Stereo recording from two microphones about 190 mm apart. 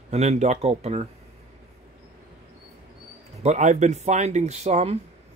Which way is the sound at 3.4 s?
35° right (ahead or behind).